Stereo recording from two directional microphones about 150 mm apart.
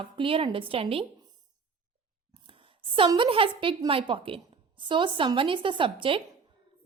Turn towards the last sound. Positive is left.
turn(degrees=-35)  # may be behind; listen again after turning